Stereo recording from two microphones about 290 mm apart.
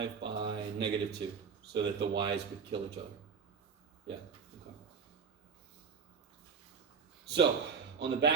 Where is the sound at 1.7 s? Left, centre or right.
Right.